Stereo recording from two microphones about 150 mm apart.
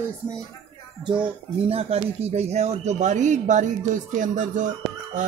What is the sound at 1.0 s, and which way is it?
Speech, 35° right (ahead or behind).